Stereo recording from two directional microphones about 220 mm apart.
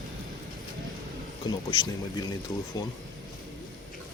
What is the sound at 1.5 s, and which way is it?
Speech, 20° left (ahead or behind).